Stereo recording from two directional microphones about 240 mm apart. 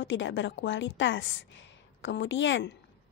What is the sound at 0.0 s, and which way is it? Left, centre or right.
A woman's voice, left.